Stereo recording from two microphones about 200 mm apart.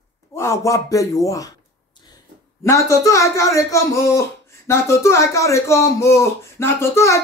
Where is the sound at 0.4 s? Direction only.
15° left (ahead or behind).